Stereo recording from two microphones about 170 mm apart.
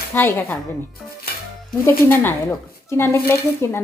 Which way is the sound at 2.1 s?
10° left (ahead or behind).